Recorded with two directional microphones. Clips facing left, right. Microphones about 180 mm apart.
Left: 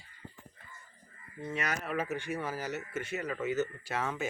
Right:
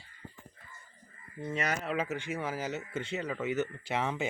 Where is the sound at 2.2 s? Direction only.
20° right (ahead or behind).